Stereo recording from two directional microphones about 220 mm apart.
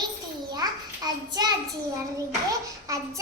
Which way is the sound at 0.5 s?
20° right (ahead or behind).